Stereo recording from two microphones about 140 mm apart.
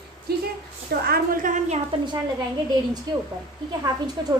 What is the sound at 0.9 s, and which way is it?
Speech, 80° right.